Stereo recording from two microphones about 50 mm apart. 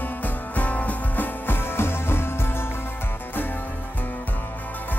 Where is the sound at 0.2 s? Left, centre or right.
Left.